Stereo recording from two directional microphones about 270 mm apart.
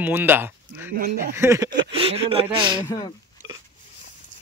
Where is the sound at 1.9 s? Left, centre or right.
Right.